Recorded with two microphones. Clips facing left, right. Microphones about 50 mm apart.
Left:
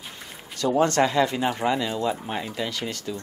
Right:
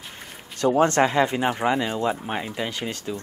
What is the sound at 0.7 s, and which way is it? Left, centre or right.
Speech, right.